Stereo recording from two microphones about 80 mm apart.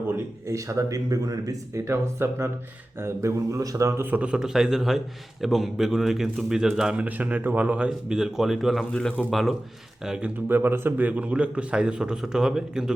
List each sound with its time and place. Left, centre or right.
0.4 s speech: right
4.0 s a man's voice: centre
8.9 s speech: centre
10.0 s a man's voice: centre
10.5 s a man's voice: right; by 12.9 s centre